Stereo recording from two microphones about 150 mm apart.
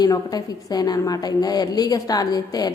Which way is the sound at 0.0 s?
25° left (ahead or behind).